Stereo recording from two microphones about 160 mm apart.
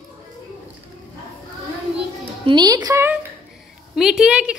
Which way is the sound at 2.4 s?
25° right (ahead or behind).